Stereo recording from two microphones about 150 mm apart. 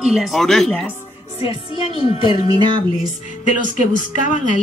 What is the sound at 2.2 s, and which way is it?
Speech, 30° right (ahead or behind).